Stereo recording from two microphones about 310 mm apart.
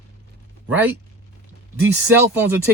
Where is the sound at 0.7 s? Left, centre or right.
Centre.